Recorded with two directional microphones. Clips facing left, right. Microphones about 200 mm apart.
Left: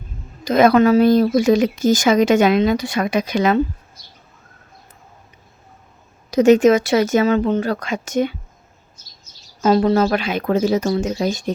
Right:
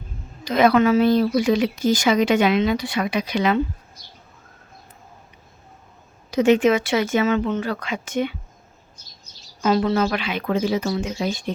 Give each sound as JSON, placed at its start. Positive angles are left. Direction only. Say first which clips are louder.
{"t": 0.4, "sound": "speech", "louder": "left 4 dB", "side_deg": 45}
{"t": 6.3, "sound": "speech", "louder": "left 5 dB", "side_deg": 40}
{"t": 9.6, "sound": "speech", "louder": "left 4 dB", "side_deg": 40}